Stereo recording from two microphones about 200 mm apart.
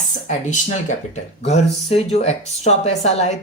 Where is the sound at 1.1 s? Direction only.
35° left (ahead or behind).